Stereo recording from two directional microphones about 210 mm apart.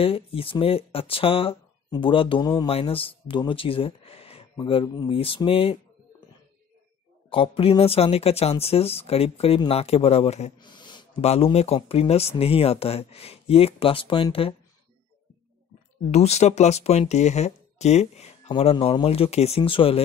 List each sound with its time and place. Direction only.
0.0 s speech: 25° left (ahead or behind)
7.2 s speech: 25° left (ahead or behind)
16.1 s speech: 30° left (ahead or behind)